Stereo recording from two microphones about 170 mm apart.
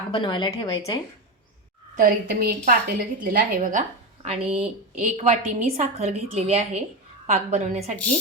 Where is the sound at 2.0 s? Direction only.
60° right (ahead or behind); by 7.9 s 45° right (ahead or behind).